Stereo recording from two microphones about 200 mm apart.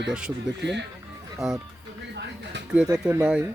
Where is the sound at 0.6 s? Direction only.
60° right (ahead or behind).